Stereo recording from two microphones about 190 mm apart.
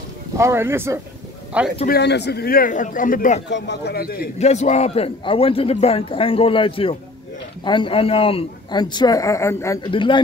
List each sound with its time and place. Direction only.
0.4 s speech: 15° right (ahead or behind)
1.9 s speech: 60° left (ahead or behind); by 3.4 s 45° left (ahead or behind)
3.4 s a man's voice: 65° left (ahead or behind)
4.4 s a man's voice: 35° left (ahead or behind); by 9.8 s 15° left (ahead or behind)
9.8 s a man's voice: 25° left (ahead or behind)